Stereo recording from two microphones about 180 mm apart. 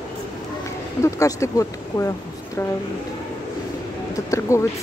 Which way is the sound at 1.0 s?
15° left (ahead or behind).